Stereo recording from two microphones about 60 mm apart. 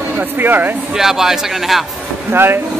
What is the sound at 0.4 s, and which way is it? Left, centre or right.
Speech, right.